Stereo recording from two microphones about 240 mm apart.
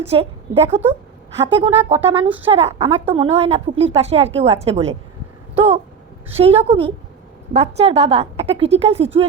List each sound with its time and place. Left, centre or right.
0.1 s a woman's voice: right